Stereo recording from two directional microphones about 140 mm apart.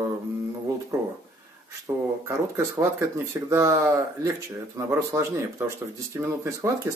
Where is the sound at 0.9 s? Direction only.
25° right (ahead or behind).